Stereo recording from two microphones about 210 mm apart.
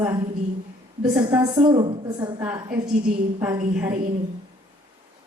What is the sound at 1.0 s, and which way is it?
Speech, 10° right (ahead or behind).